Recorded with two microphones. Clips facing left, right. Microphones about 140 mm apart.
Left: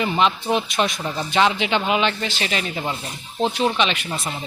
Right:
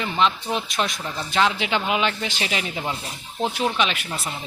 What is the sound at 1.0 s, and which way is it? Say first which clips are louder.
Speech: left 4 dB; 15° left (ahead or behind).